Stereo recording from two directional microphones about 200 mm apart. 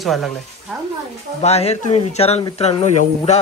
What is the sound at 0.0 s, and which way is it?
Speech, centre (ahead or behind).